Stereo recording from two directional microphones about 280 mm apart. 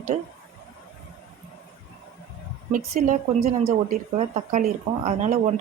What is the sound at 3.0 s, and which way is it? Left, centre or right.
Speech, right.